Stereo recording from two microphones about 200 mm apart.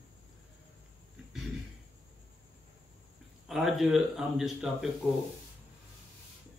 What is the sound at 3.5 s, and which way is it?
A man's voice, centre (ahead or behind).